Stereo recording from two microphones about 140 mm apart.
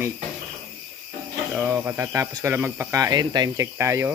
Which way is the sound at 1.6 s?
15° right (ahead or behind).